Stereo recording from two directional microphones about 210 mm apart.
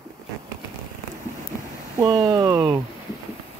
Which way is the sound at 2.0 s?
15° right (ahead or behind).